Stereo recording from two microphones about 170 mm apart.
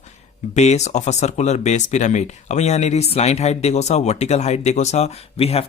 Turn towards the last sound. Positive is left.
turn(degrees=35)  # may be behind; listen again after turning